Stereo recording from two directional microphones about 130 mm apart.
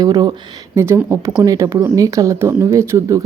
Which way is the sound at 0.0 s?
30° right (ahead or behind).